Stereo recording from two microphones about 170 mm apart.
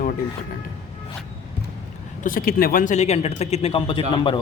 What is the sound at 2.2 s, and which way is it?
A man's voice, 55° left (ahead or behind).